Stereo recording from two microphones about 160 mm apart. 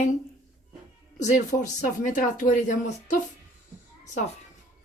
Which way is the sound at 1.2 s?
50° left (ahead or behind).